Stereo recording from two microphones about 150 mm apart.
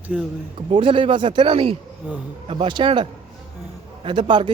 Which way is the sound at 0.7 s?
35° right (ahead or behind).